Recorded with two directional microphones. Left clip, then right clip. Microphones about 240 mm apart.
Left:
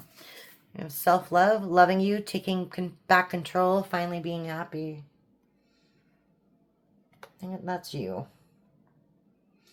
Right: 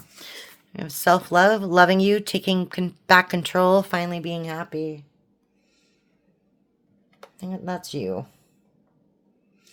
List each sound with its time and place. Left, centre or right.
0.2 s speech: right
7.3 s speech: right